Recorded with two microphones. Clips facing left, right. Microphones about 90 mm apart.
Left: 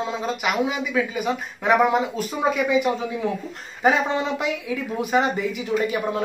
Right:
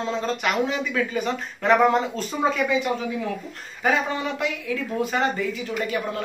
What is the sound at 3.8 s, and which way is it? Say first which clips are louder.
Speech: left 3 dB; 20° left (ahead or behind).